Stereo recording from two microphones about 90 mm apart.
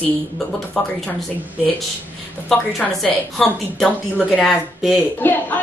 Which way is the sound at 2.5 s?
5° left (ahead or behind).